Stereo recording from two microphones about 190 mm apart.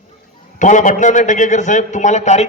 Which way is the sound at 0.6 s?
40° left (ahead or behind).